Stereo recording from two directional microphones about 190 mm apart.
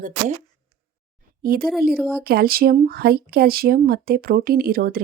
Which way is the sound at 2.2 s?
50° right (ahead or behind).